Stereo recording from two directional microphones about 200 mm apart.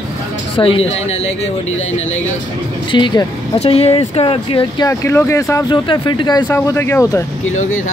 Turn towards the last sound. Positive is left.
turn(degrees=15)  # may be behind; listen again after turning